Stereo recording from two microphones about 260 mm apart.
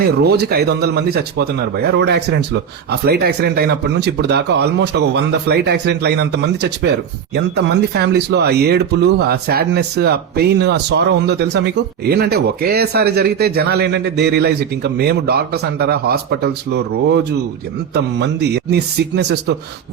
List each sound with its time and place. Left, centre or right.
0.0 s speech: right